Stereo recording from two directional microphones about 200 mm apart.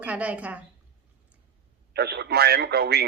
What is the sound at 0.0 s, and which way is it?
Speech, 5° right (ahead or behind).